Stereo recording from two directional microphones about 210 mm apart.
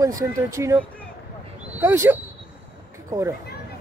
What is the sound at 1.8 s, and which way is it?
Speech, 15° right (ahead or behind).